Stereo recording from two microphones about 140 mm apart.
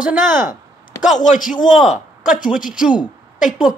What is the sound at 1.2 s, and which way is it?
Speech, 70° left (ahead or behind).